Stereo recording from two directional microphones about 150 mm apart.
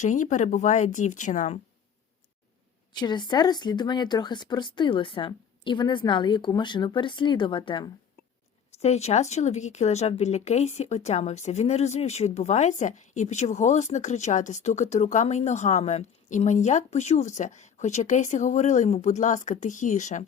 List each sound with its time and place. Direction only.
0.0 s speech: 55° left (ahead or behind)
2.9 s speech: 30° left (ahead or behind)
8.8 s a woman's voice: 45° left (ahead or behind)